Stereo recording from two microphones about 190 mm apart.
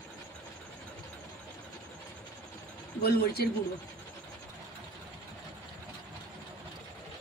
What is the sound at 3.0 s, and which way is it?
Speech, 55° left (ahead or behind).